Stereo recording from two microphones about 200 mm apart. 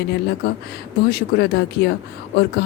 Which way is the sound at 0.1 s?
55° left (ahead or behind).